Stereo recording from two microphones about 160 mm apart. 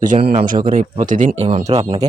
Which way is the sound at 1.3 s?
40° right (ahead or behind).